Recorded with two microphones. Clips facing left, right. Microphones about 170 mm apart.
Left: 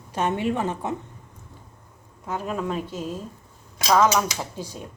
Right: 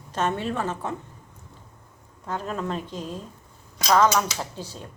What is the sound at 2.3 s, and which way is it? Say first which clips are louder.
A woman's voice: left 2 dB; 10° left (ahead or behind).